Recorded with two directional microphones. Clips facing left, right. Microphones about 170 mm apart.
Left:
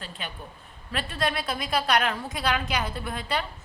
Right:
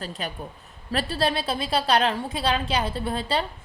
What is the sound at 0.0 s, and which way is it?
A woman's voice, 40° right (ahead or behind).